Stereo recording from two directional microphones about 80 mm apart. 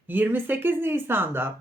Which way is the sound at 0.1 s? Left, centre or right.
Right.